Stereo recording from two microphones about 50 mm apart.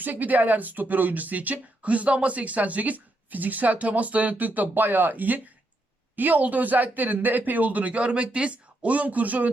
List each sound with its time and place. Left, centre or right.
0.0 s speech: right